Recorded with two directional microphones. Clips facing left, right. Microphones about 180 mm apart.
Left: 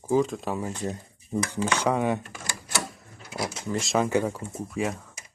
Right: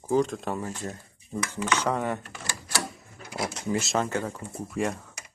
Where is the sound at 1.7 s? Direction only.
10° left (ahead or behind).